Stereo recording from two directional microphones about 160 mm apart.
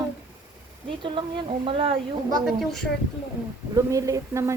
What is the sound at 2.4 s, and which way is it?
Speech, centre (ahead or behind).